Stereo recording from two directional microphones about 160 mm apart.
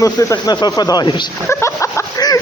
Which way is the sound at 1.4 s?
15° left (ahead or behind).